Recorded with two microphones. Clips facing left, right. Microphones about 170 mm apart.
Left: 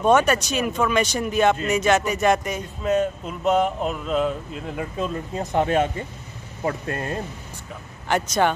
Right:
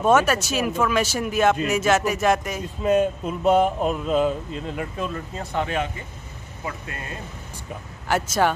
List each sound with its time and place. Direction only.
0.0 s speech: 5° right (ahead or behind)
5.5 s speech: 45° left (ahead or behind)
8.1 s speech: 5° right (ahead or behind)